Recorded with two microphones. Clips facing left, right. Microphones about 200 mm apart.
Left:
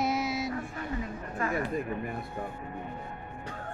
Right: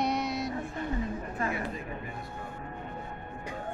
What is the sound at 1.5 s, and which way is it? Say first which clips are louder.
Speech: left 4 dB; 55° left (ahead or behind).